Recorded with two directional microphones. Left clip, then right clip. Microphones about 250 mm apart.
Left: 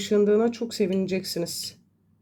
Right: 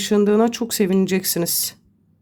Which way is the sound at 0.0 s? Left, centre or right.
Right.